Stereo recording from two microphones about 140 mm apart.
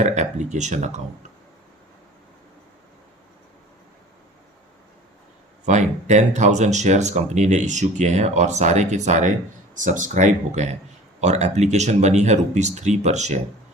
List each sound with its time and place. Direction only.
0.0 s speech: 55° right (ahead or behind)
5.6 s speech: 60° right (ahead or behind)